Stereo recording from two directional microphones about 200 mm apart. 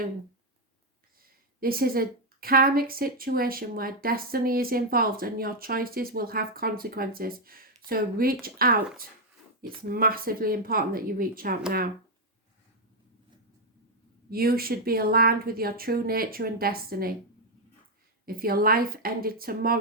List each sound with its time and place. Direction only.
1.6 s a woman's voice: 45° right (ahead or behind)
14.3 s a woman's voice: 50° right (ahead or behind)
18.3 s a woman's voice: 50° right (ahead or behind)